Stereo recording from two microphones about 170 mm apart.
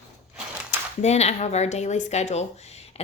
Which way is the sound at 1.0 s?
40° left (ahead or behind).